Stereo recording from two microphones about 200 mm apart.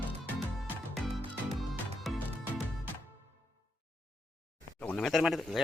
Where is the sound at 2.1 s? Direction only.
Centre (ahead or behind).